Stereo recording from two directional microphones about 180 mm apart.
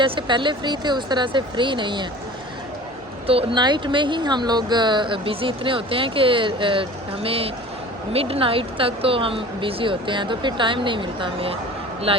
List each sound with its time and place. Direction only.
0.0 s speech: 25° right (ahead or behind)
3.2 s speech: 30° right (ahead or behind)